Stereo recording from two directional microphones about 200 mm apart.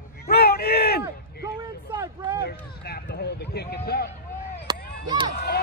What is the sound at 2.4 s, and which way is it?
Run, 55° left (ahead or behind).